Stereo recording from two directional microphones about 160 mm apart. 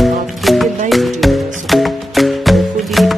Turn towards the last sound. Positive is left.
turn(degrees=0)  # may be behind; listen again after turning